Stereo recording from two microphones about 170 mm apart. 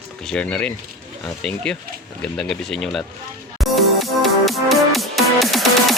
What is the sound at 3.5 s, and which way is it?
Music, centre (ahead or behind).